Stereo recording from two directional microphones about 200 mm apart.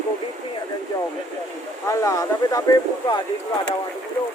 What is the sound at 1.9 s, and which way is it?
Speech, 15° left (ahead or behind).